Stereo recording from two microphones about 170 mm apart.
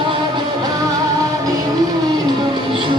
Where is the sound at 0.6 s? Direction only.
20° right (ahead or behind).